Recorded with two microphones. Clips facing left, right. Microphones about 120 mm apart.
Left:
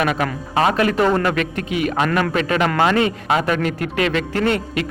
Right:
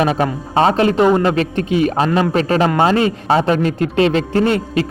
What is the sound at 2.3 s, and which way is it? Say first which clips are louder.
A man's voice: right 4 dB; 35° right (ahead or behind).